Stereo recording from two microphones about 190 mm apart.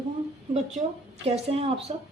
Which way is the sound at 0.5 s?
35° right (ahead or behind).